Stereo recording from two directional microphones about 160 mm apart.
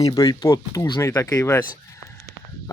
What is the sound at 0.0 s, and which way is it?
Speech, 25° left (ahead or behind).